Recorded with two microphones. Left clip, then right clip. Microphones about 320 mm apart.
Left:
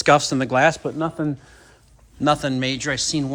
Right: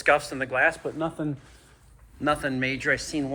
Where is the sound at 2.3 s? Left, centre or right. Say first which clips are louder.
Left 4 dB; centre.